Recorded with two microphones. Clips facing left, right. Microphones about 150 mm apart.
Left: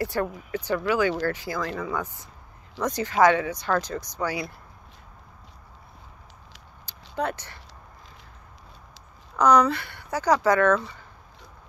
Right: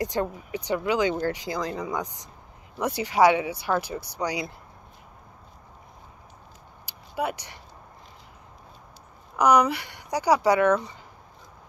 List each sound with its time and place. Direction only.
0.0 s speech: 20° right (ahead or behind)
6.9 s a sound: 10° right (ahead or behind)
9.4 s speech: 15° right (ahead or behind)